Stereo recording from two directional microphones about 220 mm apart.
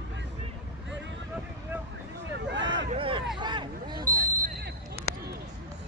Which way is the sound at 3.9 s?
40° right (ahead or behind).